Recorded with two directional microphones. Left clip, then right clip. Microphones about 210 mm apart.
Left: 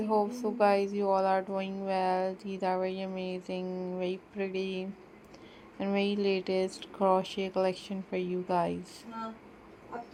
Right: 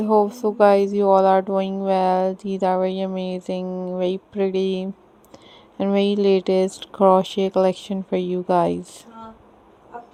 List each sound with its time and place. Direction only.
0.0 s speech: 45° right (ahead or behind)